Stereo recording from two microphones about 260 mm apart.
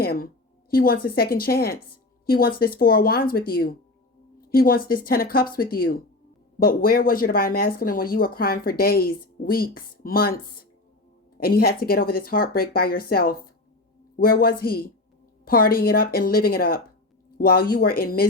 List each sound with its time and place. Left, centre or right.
0.0 s a woman's voice: left
11.3 s a woman's voice: left